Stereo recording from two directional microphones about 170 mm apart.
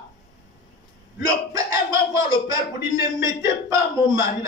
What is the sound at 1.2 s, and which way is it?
Speech, 20° right (ahead or behind).